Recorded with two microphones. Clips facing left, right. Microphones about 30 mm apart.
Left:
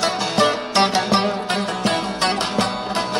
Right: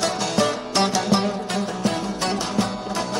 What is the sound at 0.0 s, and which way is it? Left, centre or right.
Music, left.